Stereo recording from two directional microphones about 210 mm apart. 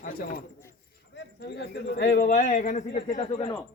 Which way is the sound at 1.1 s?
55° left (ahead or behind).